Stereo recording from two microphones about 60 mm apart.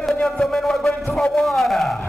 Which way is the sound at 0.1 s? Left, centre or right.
Centre.